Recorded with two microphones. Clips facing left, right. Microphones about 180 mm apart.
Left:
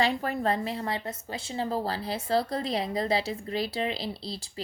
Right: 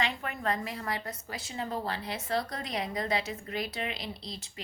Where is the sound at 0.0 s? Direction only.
35° left (ahead or behind).